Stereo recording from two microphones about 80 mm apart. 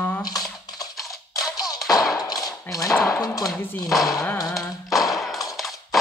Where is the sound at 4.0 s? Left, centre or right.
Left.